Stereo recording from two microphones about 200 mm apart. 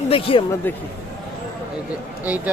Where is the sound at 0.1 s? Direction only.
25° left (ahead or behind).